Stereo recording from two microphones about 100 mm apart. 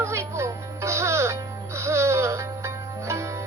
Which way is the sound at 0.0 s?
30° right (ahead or behind).